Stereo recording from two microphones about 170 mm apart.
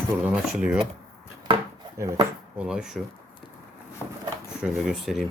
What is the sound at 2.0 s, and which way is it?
Speech, 20° right (ahead or behind).